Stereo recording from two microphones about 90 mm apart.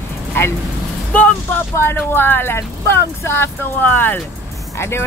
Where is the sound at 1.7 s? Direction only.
25° left (ahead or behind).